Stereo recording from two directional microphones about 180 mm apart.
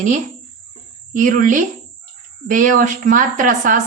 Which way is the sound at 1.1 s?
45° right (ahead or behind).